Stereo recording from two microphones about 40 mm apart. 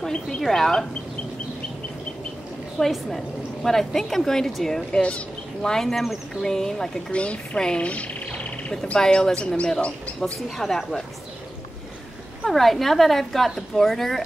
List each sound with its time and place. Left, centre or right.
0.4 s speech: centre
2.8 s speech: centre
7.1 s a woman's voice: left
7.8 s a sound: left
9.0 s a woman's voice: left
10.6 s speech: centre
12.4 s a woman's voice: centre